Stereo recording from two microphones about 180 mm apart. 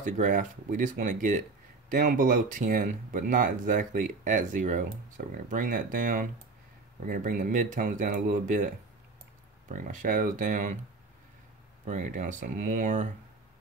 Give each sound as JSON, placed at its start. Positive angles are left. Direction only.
{"t": 0.0, "sound": "speech", "side_deg": -45}
{"t": 9.7, "sound": "speech", "side_deg": -45}
{"t": 11.8, "sound": "speech", "side_deg": -45}